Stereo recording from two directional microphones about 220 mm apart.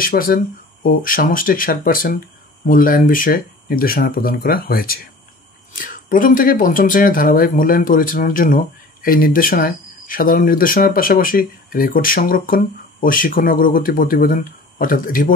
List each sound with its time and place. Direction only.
0.0 s speech: 40° left (ahead or behind)